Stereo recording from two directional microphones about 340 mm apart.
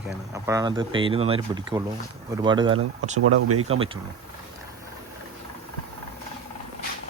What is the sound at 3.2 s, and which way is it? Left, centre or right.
Speech, right.